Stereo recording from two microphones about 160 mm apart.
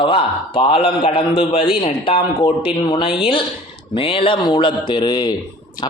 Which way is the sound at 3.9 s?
35° left (ahead or behind).